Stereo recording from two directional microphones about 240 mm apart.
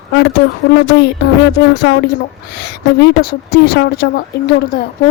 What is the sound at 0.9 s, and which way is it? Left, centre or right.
A woman's voice, left.